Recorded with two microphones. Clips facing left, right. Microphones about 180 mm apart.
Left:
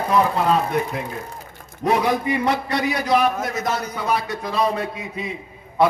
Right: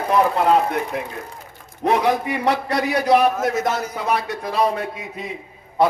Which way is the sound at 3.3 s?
5° right (ahead or behind).